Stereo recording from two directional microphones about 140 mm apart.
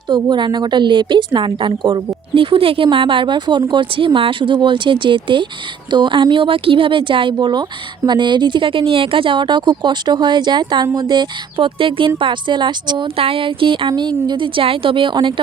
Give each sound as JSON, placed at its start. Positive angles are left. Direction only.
{"t": 0.1, "sound": "a woman's voice", "side_deg": -35}